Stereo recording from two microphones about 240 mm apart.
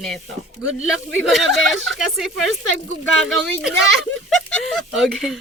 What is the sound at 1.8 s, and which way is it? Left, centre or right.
Speech, centre.